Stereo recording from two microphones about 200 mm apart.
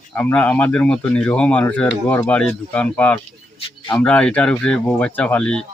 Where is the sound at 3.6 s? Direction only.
20° left (ahead or behind).